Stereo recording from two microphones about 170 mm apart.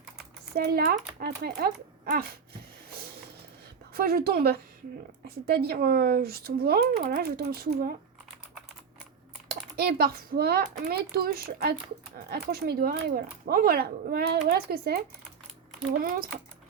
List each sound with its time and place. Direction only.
0.5 s speech: 65° right (ahead or behind)
3.9 s speech: 65° right (ahead or behind)
9.5 s speech: 65° right (ahead or behind)
16.0 s speech: 60° right (ahead or behind)